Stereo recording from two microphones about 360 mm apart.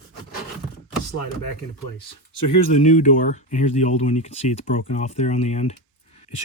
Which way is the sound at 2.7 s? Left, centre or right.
Centre.